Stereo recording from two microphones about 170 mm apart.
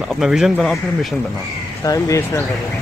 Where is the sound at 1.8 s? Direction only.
20° left (ahead or behind).